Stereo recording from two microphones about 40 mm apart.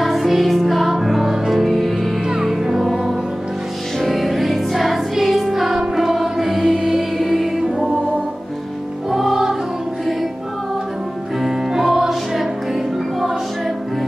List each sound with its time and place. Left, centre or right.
0.0 s music: centre
4.0 s music: centre
9.1 s music: centre
11.4 s music: centre